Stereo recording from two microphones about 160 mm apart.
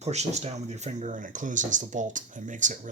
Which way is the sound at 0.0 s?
45° right (ahead or behind).